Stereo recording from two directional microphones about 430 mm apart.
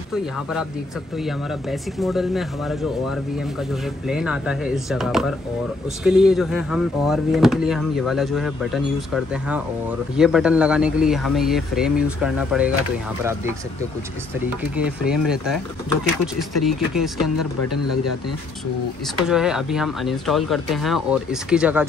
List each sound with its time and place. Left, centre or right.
0.1 s speech: centre
17.4 s speech: left
19.2 s speech: centre